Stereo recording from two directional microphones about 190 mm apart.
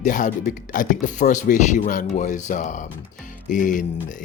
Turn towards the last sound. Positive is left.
turn(degrees=45)  # may be behind; listen again after turning